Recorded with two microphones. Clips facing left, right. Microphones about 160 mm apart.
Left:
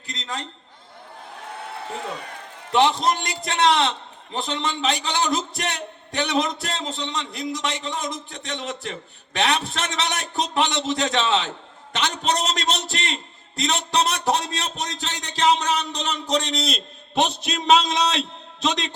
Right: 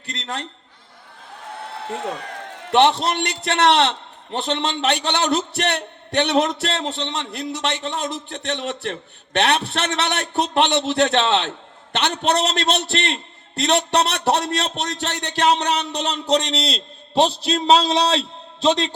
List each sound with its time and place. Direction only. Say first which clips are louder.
0.0 s a man's voice: right 2 dB; 65° right (ahead or behind)
2.6 s a man's voice: right 3 dB; 70° right (ahead or behind)
16.6 s a man's voice: right 1 dB; 30° right (ahead or behind)